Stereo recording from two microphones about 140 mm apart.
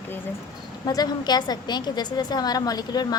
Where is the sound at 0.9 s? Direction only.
30° left (ahead or behind).